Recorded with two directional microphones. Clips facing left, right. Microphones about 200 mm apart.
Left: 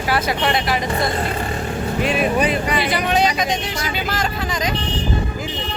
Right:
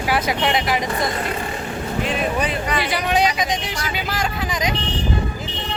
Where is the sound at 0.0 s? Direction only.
15° right (ahead or behind).